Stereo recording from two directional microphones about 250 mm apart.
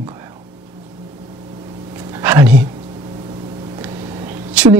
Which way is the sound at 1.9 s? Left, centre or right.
Centre.